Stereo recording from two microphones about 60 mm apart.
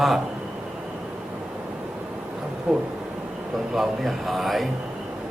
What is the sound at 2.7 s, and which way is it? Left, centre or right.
Speech, right.